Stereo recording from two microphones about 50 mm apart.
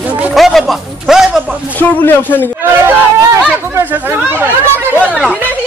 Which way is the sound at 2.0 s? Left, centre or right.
Left.